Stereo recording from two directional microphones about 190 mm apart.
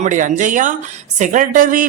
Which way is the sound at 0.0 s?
40° right (ahead or behind).